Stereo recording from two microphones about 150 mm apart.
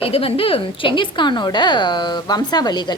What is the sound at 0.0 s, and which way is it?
A woman's voice, 40° left (ahead or behind).